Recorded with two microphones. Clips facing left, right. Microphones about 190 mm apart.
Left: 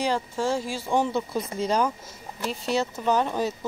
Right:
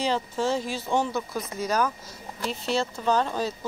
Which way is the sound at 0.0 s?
10° left (ahead or behind).